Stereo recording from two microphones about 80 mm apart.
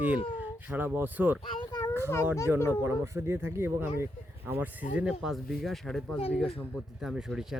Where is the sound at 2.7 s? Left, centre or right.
Right.